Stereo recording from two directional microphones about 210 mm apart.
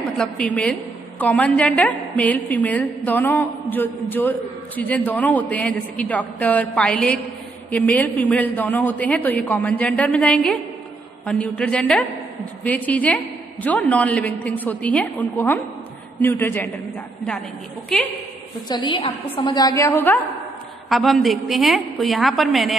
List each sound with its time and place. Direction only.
0.2 s a man's voice: 5° left (ahead or behind)
18.7 s a woman's voice: 20° left (ahead or behind); by 22.8 s centre (ahead or behind)